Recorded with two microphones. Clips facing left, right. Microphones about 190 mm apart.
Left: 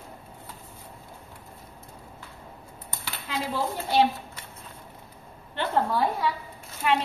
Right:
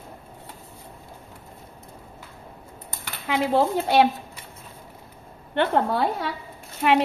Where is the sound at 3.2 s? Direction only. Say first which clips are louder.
Right 8 dB; 80° right.